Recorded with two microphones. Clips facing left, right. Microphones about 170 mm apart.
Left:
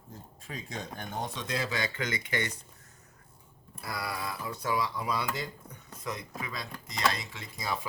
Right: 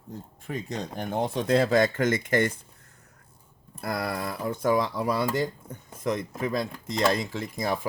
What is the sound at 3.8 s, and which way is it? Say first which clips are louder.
Speech: right 7 dB; 55° right (ahead or behind).